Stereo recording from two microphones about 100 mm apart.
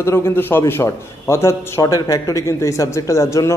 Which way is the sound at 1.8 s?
40° left (ahead or behind).